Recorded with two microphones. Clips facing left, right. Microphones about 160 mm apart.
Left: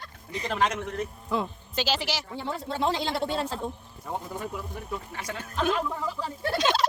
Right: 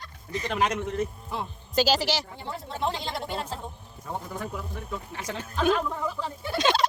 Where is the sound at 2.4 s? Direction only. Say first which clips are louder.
Left 3 dB; 80° left.